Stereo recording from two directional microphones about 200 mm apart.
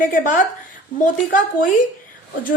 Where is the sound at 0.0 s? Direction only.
45° left (ahead or behind).